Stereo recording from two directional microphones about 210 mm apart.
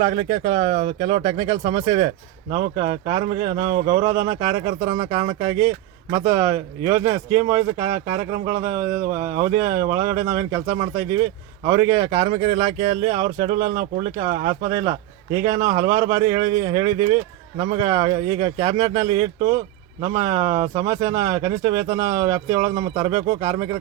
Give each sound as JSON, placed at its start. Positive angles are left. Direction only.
{"t": 0.0, "sound": "speech", "side_deg": -25}
{"t": 3.6, "sound": "speech", "side_deg": -45}
{"t": 3.8, "sound": "speech", "side_deg": -20}